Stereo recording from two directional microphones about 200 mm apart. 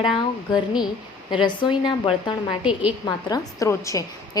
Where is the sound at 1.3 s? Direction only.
25° left (ahead or behind).